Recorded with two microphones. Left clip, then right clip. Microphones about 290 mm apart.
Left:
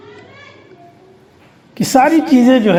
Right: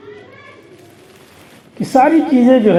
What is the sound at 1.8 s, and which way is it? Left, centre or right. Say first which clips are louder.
Speech: even; left.